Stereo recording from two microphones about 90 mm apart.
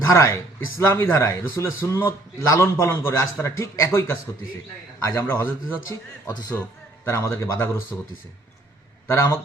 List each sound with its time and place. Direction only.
0.0 s a man's voice: 35° left (ahead or behind)
6.5 s a man's voice: 15° left (ahead or behind)
7.0 s a man's voice: 30° left (ahead or behind)
9.0 s a man's voice: 30° left (ahead or behind)